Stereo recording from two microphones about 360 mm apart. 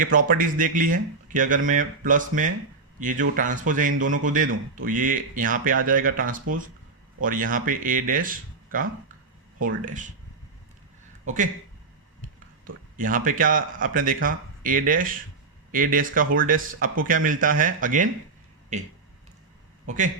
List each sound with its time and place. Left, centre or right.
0.0 s speech: right
12.6 s speech: right